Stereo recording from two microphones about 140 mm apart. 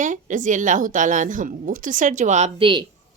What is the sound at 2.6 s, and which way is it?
Speech, 35° right (ahead or behind).